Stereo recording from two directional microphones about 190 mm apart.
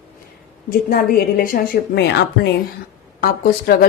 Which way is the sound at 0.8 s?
50° left (ahead or behind).